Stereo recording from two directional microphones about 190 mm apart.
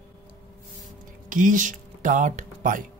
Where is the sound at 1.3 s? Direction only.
45° right (ahead or behind).